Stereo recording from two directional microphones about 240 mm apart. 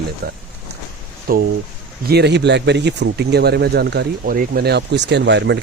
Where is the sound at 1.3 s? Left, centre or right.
Right.